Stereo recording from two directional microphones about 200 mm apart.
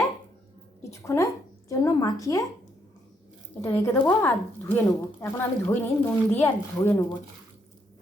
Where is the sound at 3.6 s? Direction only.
10° left (ahead or behind).